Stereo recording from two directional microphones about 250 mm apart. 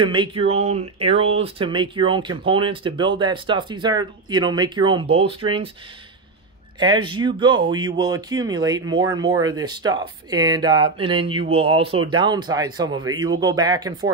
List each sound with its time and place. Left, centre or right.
0.0 s speech: centre
6.8 s speech: centre